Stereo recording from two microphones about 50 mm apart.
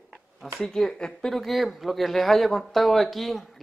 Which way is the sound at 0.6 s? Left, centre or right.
Centre.